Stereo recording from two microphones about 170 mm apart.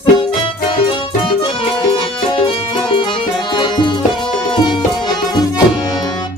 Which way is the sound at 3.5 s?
25° left (ahead or behind).